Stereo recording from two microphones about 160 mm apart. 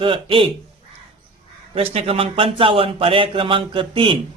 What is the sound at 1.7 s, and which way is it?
A man's voice, 35° right (ahead or behind).